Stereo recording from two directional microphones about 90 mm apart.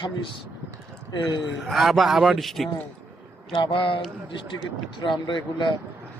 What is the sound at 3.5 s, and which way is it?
A man's voice, 70° left (ahead or behind).